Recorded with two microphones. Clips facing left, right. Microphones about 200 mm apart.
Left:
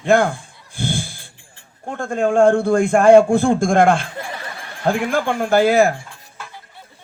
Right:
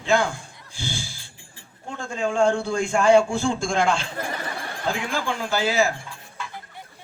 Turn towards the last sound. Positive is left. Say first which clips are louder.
# left 8 dB
turn(degrees=55)  # may be behind; listen again after turning